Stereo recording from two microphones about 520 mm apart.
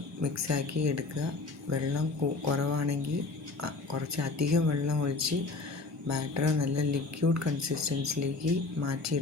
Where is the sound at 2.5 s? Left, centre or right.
Right.